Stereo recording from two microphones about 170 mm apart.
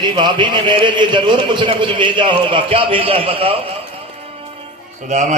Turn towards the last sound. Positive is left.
turn(degrees=-45)  # may be behind; listen again after turning